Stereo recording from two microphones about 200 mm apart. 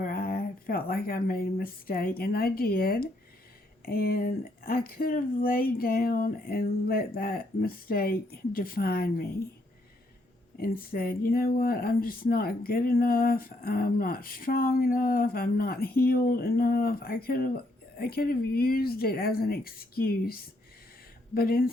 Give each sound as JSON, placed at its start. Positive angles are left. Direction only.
{"t": 0.0, "sound": "speech", "side_deg": 45}
{"t": 10.6, "sound": "speech", "side_deg": 45}